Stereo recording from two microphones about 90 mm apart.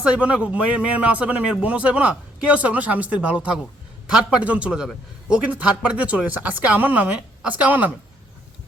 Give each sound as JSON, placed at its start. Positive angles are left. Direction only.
{"t": 0.0, "sound": "a man's voice", "side_deg": -15}